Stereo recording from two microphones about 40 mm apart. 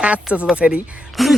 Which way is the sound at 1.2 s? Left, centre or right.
Centre.